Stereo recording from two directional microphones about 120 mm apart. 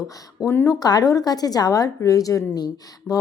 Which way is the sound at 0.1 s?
25° left (ahead or behind).